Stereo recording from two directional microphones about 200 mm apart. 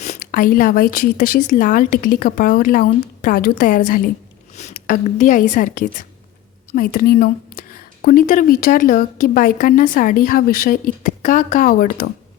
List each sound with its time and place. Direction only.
0.0 s a woman's voice: 40° left (ahead or behind)